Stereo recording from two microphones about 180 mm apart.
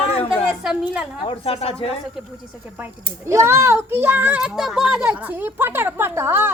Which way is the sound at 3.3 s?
15° right (ahead or behind).